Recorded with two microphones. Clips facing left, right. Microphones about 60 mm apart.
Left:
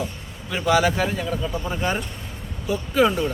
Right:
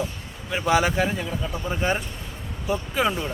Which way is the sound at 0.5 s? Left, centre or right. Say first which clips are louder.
Left 1 dB; right.